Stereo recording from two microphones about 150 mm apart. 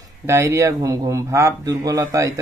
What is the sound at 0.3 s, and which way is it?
A man's voice, 20° right (ahead or behind).